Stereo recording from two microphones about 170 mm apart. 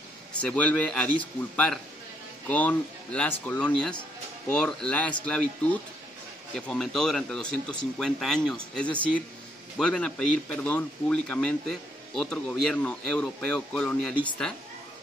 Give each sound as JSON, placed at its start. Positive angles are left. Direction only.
{"t": 0.3, "sound": "speech", "side_deg": 5}
{"t": 2.4, "sound": "speech", "side_deg": 10}